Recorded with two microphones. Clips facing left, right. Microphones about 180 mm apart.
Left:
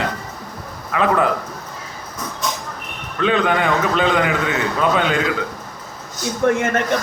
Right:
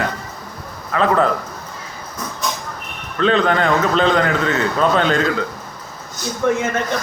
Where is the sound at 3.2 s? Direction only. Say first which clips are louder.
Right 2 dB; 10° left (ahead or behind).